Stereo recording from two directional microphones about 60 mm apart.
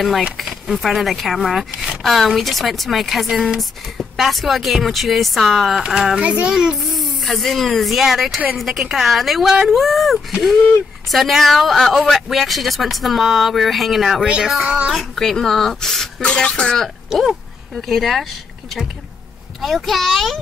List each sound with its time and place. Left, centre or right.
0.4 s speech: centre
6.2 s a child's voice: right
6.5 s speech: centre
6.8 s speech: centre
14.2 s speech: centre
15.0 s speech: centre
16.2 s speech: centre
17.1 s speech: centre
19.6 s speech: centre